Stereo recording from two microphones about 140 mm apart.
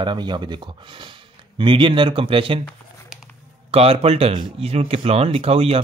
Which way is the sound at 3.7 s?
45° right (ahead or behind).